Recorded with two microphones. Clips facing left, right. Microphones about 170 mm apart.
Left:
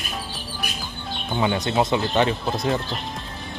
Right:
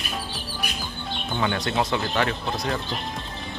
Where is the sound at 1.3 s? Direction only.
20° left (ahead or behind).